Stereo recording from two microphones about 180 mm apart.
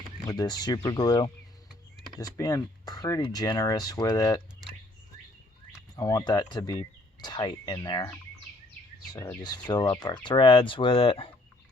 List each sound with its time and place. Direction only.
0.3 s speech: 20° left (ahead or behind)
6.0 s speech: 20° left (ahead or behind)
9.1 s speech: 15° left (ahead or behind)
9.4 s speech: 25° left (ahead or behind)